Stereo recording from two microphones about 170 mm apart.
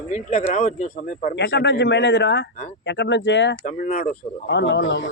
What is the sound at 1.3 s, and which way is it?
A man's voice, 85° left.